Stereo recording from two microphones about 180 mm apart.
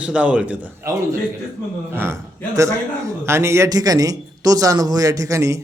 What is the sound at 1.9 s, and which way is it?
A man's voice, 15° right (ahead or behind).